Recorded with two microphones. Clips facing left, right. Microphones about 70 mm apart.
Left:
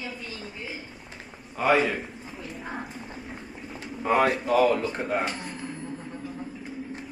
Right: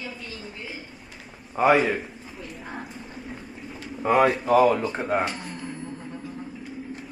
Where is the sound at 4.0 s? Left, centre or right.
Centre.